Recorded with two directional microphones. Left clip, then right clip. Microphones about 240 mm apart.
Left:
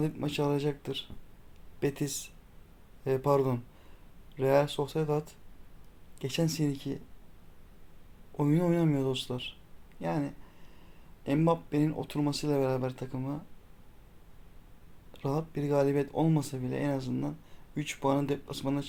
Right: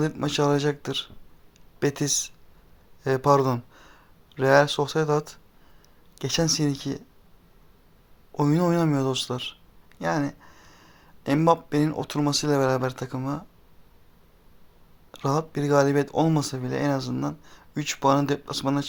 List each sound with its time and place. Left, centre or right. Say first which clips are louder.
0.0 s speech: right 8 dB; centre
8.4 s speech: right 6 dB; centre
10.0 s a sound: right 7 dB; centre
11.2 s speech: right 8 dB; centre
15.1 s speech: right 8 dB; centre